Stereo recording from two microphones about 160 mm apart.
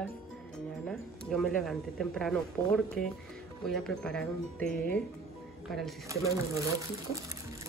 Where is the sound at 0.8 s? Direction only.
5° left (ahead or behind).